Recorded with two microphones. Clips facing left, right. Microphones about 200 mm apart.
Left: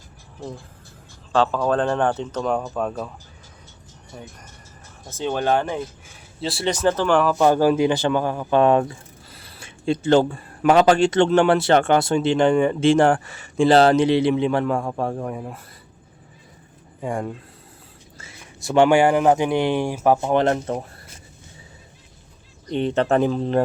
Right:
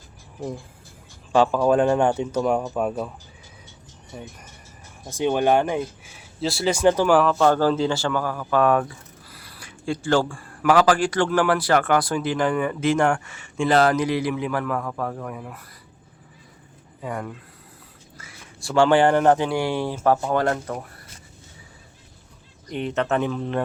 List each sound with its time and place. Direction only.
1.3 s speech: 15° right (ahead or behind)
4.1 s speech: 5° right (ahead or behind)
6.4 s speech: centre (ahead or behind)
6.7 s speech: 10° right (ahead or behind)
7.3 s speech: 15° left (ahead or behind)
17.0 s speech: 30° left (ahead or behind)
22.7 s speech: 30° left (ahead or behind)